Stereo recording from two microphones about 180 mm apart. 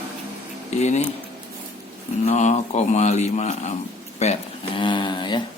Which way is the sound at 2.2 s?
40° left (ahead or behind).